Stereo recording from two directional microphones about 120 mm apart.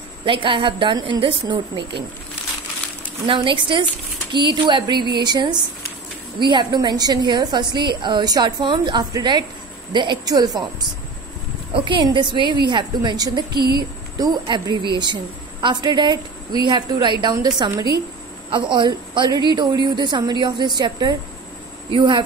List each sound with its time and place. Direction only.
0.2 s a woman's voice: 45° right (ahead or behind)
3.3 s a woman's voice: 45° right (ahead or behind)